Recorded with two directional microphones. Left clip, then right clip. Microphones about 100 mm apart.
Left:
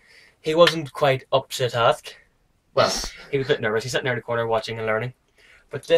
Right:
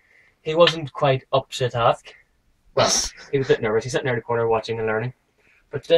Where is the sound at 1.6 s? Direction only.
25° left (ahead or behind).